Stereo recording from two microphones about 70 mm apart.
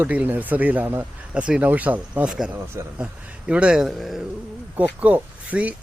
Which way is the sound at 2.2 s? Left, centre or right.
Centre.